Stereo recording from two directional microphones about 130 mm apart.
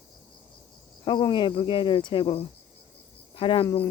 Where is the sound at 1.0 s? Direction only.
40° left (ahead or behind).